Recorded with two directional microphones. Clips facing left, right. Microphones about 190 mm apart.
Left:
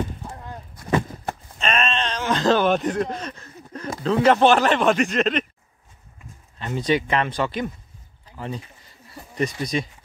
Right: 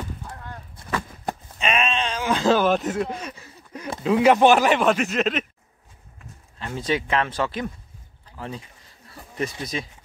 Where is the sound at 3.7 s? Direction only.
10° right (ahead or behind).